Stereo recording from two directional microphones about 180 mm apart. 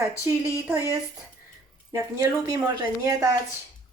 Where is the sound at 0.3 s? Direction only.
15° right (ahead or behind).